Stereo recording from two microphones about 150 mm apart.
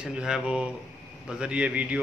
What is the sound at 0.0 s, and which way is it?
A man's voice, 5° right (ahead or behind).